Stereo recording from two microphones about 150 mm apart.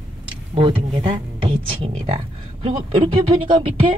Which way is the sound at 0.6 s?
35° right (ahead or behind).